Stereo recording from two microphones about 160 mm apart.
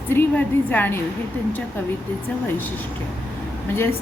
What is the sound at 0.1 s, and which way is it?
Speech, 10° left (ahead or behind).